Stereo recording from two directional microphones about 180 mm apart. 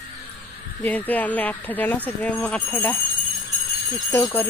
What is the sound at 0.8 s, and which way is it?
Speech, 10° left (ahead or behind).